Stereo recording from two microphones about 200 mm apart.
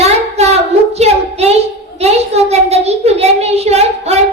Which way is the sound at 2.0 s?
30° right (ahead or behind).